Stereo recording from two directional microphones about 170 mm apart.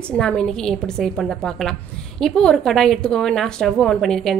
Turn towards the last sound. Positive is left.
turn(degrees=5)  # may be behind; listen again after turning